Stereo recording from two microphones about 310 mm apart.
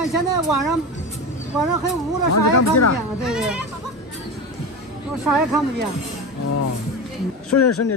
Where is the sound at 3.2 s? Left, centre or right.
Centre.